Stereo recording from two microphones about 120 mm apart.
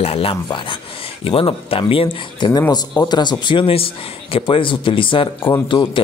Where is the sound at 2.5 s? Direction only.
35° left (ahead or behind).